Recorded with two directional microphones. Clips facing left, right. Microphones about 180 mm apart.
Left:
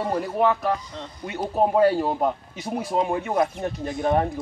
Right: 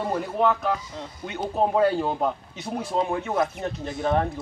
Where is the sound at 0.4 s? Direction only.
5° left (ahead or behind).